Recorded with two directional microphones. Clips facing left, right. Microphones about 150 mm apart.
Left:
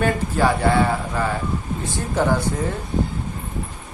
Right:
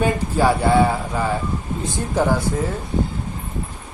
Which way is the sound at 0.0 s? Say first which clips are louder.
Right 1 dB; 10° right (ahead or behind).